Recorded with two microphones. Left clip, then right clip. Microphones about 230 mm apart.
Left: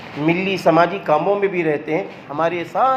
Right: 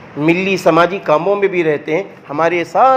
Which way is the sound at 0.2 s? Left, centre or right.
Right.